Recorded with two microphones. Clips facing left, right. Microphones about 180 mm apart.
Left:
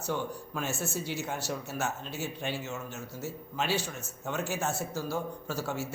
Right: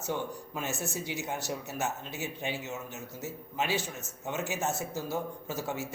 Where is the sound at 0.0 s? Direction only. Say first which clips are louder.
Left 1 dB; 20° right (ahead or behind).